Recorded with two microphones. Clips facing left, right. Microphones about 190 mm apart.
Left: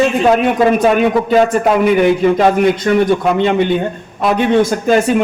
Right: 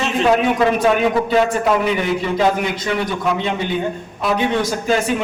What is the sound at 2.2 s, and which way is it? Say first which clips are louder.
A man's voice: left 7 dB; 50° left (ahead or behind).